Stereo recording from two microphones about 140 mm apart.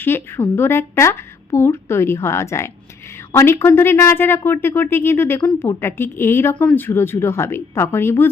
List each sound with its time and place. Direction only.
0.0 s speech: 15° left (ahead or behind)